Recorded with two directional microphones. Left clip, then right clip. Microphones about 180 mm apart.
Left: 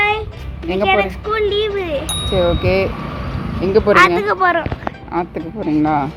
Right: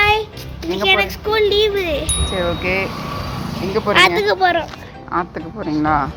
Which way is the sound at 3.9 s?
Centre (ahead or behind).